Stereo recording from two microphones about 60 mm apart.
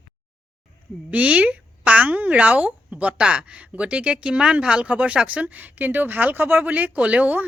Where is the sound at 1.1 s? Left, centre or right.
Right.